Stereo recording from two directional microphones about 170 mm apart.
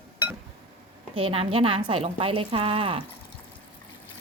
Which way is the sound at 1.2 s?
35° right (ahead or behind).